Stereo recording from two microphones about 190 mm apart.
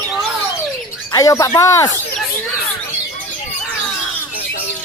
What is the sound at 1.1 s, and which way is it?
Speech, 15° left (ahead or behind).